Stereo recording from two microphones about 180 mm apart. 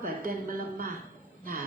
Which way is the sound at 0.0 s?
55° right (ahead or behind).